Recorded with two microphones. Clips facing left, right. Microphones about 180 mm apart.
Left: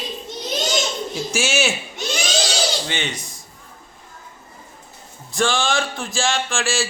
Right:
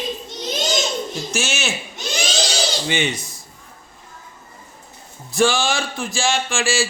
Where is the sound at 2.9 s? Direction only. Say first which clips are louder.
Right 5 dB; 10° right (ahead or behind).